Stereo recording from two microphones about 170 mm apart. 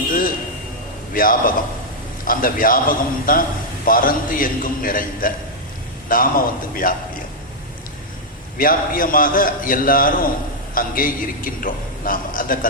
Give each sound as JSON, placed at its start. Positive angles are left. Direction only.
{"t": 0.1, "sound": "a sound", "side_deg": 55}
{"t": 1.1, "sound": "a man's voice", "side_deg": 55}
{"t": 8.5, "sound": "a man's voice", "side_deg": 55}